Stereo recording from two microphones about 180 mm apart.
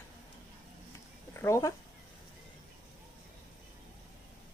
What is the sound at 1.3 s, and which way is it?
Speech, 15° left (ahead or behind).